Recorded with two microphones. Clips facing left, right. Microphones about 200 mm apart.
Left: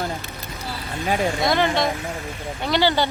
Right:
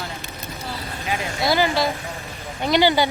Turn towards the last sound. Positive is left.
turn(degrees=-15)  # may be behind; listen again after turning